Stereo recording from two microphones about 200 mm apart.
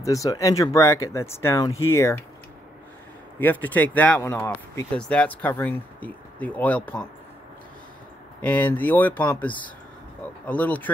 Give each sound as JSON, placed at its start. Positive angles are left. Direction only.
{"t": 0.0, "sound": "speech", "side_deg": 15}
{"t": 3.3, "sound": "speech", "side_deg": 10}
{"t": 8.4, "sound": "speech", "side_deg": 10}